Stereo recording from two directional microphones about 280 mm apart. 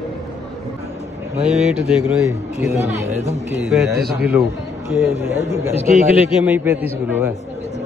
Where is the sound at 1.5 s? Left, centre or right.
Centre.